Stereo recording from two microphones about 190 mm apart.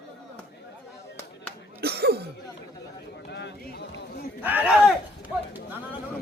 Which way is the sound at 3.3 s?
65° left (ahead or behind).